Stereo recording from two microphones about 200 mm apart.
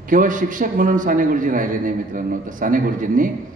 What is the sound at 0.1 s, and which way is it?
A man's voice, 40° right (ahead or behind).